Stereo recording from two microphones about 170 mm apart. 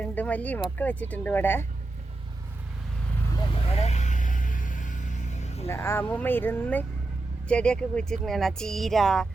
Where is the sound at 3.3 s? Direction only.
35° left (ahead or behind).